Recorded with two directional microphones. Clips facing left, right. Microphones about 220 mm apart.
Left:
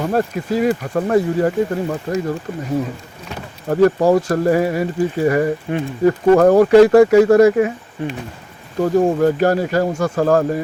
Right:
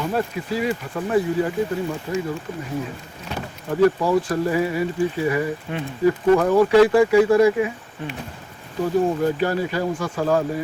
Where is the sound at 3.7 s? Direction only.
45° left (ahead or behind).